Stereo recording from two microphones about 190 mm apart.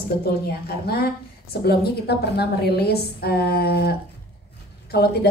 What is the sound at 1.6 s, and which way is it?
A woman's voice, 55° left (ahead or behind).